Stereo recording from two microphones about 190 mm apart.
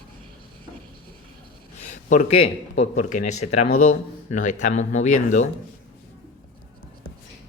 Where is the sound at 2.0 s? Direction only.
35° left (ahead or behind).